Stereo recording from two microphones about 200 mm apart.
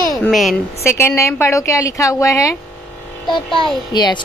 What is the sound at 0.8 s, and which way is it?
A woman's voice, 15° left (ahead or behind).